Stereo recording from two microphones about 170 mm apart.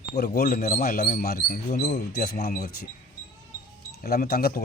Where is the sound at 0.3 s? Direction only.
60° left (ahead or behind).